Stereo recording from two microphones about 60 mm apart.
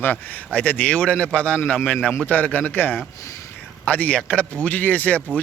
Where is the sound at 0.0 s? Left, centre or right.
Left.